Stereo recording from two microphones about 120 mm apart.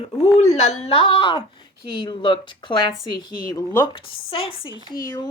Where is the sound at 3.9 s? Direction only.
50° left (ahead or behind).